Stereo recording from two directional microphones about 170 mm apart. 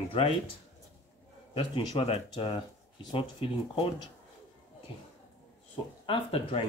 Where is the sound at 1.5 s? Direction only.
30° left (ahead or behind).